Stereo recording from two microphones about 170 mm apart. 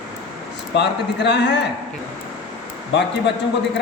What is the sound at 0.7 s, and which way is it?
Speech, 90° left.